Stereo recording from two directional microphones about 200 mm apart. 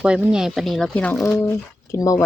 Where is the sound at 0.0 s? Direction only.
5° right (ahead or behind).